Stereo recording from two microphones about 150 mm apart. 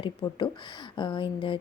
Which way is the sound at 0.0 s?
35° left (ahead or behind).